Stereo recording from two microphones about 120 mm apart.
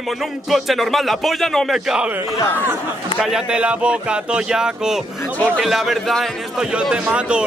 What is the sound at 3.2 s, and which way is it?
A man's voice, 5° right (ahead or behind).